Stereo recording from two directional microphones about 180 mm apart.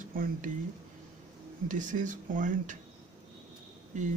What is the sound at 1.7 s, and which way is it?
Speech, 45° right (ahead or behind).